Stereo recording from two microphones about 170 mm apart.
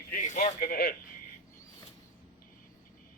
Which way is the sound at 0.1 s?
55° left (ahead or behind).